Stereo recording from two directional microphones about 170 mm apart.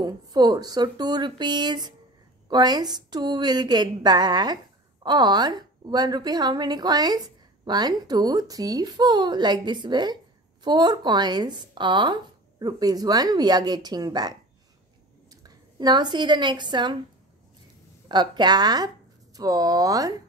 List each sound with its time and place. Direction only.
0.0 s a woman's voice: 25° right (ahead or behind)
18.0 s a woman's voice: 25° right (ahead or behind)